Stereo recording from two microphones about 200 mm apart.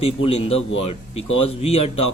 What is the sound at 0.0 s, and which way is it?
A man's voice, 30° left (ahead or behind).